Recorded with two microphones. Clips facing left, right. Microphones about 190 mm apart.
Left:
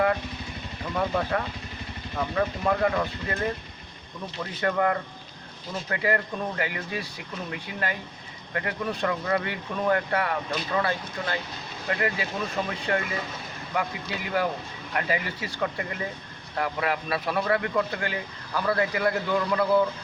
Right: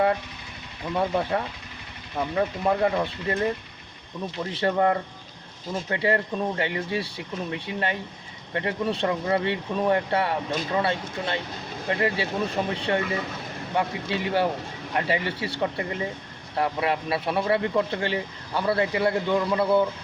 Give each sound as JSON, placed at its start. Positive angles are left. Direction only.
{"t": 0.9, "sound": "speech", "side_deg": -25}
{"t": 4.5, "sound": "speech", "side_deg": -30}